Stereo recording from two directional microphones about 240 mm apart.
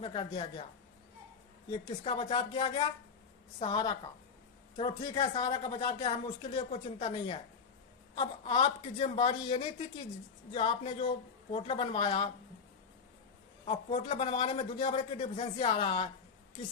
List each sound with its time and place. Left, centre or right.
0.0 s speech: left
1.7 s speech: left
13.7 s speech: left